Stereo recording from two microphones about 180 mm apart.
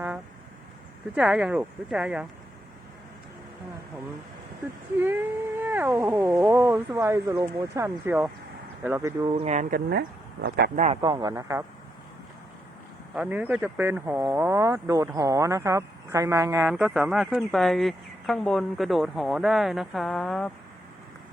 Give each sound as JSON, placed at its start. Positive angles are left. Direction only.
{"t": 1.1, "sound": "speech", "side_deg": -5}
{"t": 4.9, "sound": "speech", "side_deg": -15}
{"t": 9.3, "sound": "speech", "side_deg": -40}
{"t": 11.0, "sound": "speech", "side_deg": -20}
{"t": 13.1, "sound": "speech", "side_deg": -10}
{"t": 16.6, "sound": "speech", "side_deg": -5}